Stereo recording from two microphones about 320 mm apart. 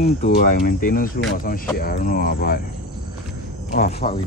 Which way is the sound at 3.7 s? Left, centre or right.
Left.